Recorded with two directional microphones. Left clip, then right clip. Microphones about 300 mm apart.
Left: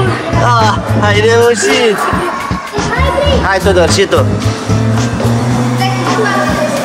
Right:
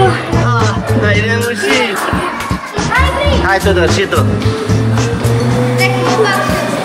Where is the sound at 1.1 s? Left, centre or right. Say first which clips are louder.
Left 6 dB; left.